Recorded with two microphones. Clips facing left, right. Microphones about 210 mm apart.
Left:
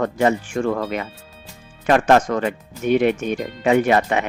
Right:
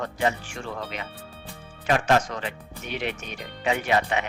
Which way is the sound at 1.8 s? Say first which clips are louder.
Left 7 dB; 55° left (ahead or behind).